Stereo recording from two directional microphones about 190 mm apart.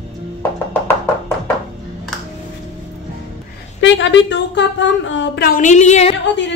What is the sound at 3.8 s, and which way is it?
A woman's voice, 70° left (ahead or behind).